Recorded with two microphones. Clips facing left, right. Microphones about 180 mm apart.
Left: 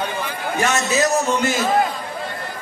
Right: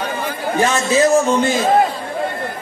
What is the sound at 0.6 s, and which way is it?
A man's voice, 30° right (ahead or behind).